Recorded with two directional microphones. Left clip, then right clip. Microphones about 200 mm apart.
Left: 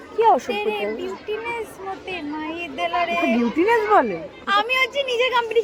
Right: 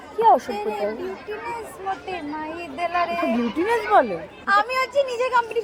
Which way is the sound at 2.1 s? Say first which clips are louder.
Left 1 dB; 15° right (ahead or behind).